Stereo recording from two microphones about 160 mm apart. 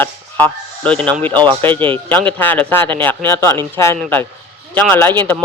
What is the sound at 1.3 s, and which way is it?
Speech, 30° right (ahead or behind).